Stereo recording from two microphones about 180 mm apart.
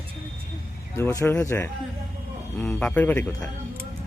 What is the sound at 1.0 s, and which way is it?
Speech, 15° left (ahead or behind).